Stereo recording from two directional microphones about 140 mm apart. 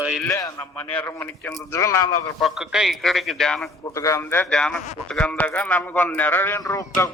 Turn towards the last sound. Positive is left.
turn(degrees=25)  # may be behind; listen again after turning